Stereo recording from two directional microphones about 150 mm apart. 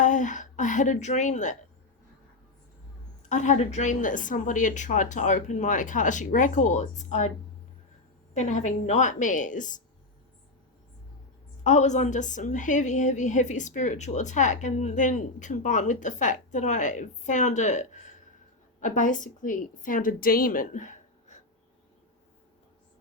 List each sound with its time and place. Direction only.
0.0 s a woman's voice: 55° left (ahead or behind)
3.2 s a woman's voice: 55° left (ahead or behind)
8.3 s a woman's voice: 50° left (ahead or behind)
11.6 s a woman's voice: 50° left (ahead or behind)